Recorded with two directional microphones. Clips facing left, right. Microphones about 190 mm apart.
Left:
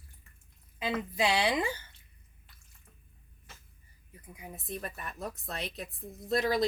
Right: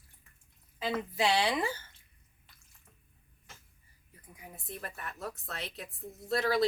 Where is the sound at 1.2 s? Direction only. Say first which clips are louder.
Even; 15° left (ahead or behind).